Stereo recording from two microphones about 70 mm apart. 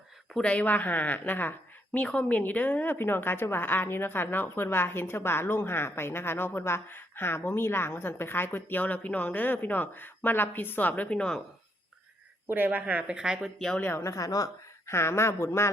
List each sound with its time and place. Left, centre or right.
0.4 s a woman's voice: left
12.5 s speech: right; by 13.5 s centre
14.0 s speech: left
14.8 s a woman's voice: left